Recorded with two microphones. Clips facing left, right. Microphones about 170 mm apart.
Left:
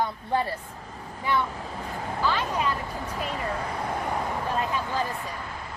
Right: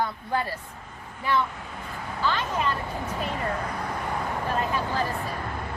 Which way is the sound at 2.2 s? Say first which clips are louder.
Even; 10° left (ahead or behind).